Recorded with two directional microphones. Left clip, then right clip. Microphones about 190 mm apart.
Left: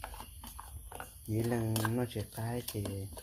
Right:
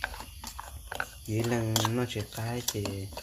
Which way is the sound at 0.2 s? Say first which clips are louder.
Right 7 dB; 5° right (ahead or behind).